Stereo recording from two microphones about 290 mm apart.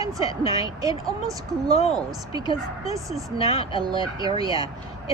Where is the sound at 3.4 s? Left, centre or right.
Centre.